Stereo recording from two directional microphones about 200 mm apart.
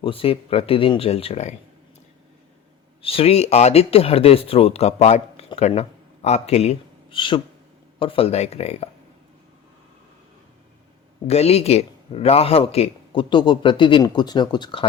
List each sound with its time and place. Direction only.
0.0 s a man's voice: 30° left (ahead or behind)
3.0 s speech: 30° left (ahead or behind)
11.3 s a man's voice: 30° left (ahead or behind)